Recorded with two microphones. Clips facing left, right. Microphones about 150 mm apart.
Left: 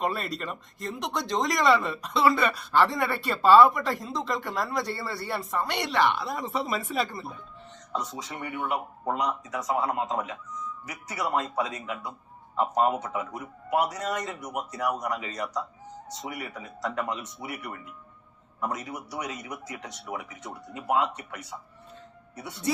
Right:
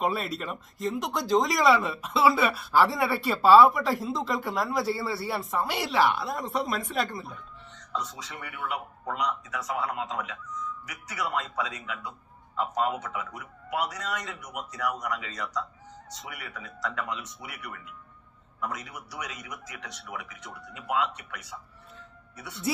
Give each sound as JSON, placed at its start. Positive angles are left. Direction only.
{"t": 0.0, "sound": "speech", "side_deg": 0}
{"t": 8.1, "sound": "a man's voice", "side_deg": 30}